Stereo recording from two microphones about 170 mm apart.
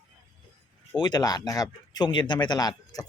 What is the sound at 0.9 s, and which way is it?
Speech, 25° left (ahead or behind).